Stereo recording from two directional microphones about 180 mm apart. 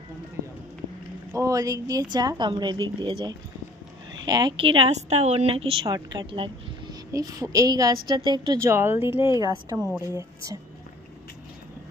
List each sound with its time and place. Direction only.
1.3 s a woman's voice: 15° right (ahead or behind)
5.9 s a woman's voice: 20° right (ahead or behind)
6.3 s a sound: 30° right (ahead or behind)
7.1 s a woman's voice: 20° right (ahead or behind)
9.8 s speech: 5° right (ahead or behind)
10.1 s speech: 20° right (ahead or behind)